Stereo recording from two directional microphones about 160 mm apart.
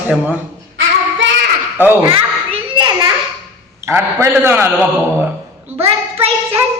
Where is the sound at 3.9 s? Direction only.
15° right (ahead or behind).